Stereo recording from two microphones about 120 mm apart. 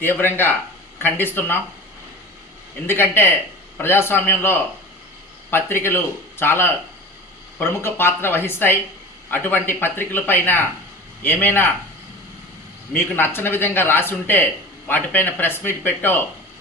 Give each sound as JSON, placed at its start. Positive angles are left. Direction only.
{"t": 0.0, "sound": "speech", "side_deg": 20}
{"t": 2.8, "sound": "speech", "side_deg": 20}
{"t": 12.9, "sound": "speech", "side_deg": 15}